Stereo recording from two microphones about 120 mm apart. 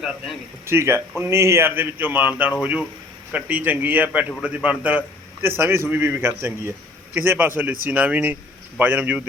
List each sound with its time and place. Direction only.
0.7 s a man's voice: 20° right (ahead or behind)